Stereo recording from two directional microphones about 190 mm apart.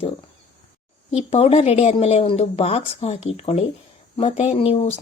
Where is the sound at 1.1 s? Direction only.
35° left (ahead or behind).